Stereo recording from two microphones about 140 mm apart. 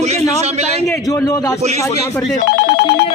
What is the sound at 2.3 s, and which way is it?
Speech, 90° left.